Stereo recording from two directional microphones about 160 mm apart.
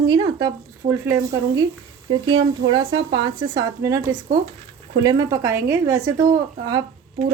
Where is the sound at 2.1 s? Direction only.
30° right (ahead or behind).